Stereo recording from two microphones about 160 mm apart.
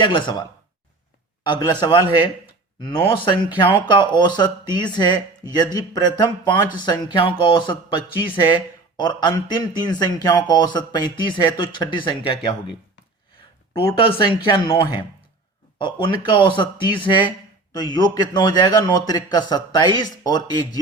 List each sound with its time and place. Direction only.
0.0 s speech: 30° left (ahead or behind)
1.5 s speech: 25° left (ahead or behind)
14.4 s speech: 30° left (ahead or behind)